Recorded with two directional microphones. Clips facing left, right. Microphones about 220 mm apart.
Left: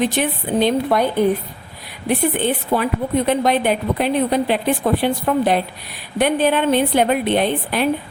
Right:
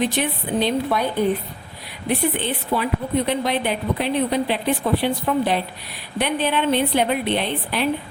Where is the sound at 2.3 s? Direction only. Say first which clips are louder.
Left 5 dB; 50° left (ahead or behind).